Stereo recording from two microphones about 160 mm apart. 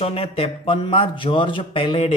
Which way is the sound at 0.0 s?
40° left (ahead or behind).